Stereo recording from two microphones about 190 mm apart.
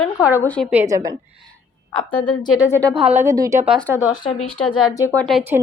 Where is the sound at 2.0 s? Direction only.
25° left (ahead or behind).